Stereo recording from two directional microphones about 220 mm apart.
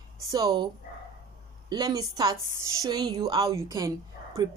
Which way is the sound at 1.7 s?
15° right (ahead or behind).